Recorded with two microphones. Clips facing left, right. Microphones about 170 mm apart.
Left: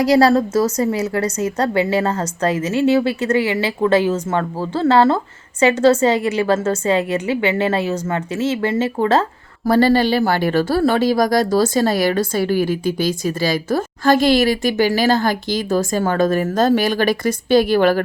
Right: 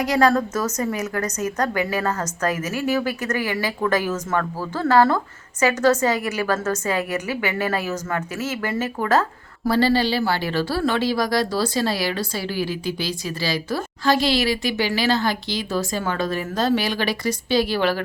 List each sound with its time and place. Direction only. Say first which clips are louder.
0.0 s a woman's voice: left 5 dB; 30° left (ahead or behind)
9.6 s a woman's voice: left 5 dB; 50° left (ahead or behind)